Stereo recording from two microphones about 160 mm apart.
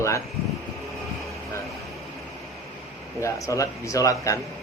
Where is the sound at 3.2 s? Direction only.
20° left (ahead or behind).